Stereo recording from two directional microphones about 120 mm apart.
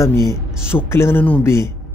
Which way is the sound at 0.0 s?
25° left (ahead or behind).